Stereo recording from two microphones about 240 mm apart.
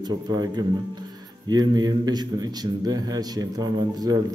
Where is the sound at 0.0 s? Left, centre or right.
Centre.